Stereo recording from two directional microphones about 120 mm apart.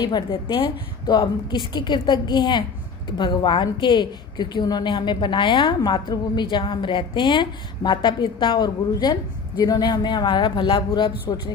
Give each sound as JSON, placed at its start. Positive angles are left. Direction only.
{"t": 0.0, "sound": "a woman's voice", "side_deg": 40}